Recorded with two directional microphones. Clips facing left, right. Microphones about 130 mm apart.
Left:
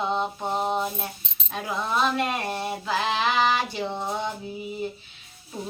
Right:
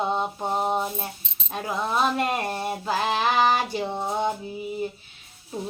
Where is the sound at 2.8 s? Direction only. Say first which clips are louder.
Right 1 dB; 45° right (ahead or behind).